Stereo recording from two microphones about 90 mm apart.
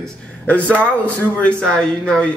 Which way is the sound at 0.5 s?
15° left (ahead or behind).